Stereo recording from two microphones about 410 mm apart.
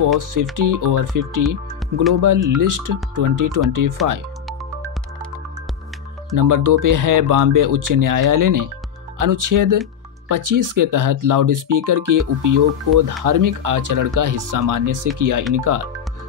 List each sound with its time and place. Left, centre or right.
0.2 s speech: right
1.8 s music: centre
2.1 s speech: right
4.0 s speech: centre
6.3 s speech: right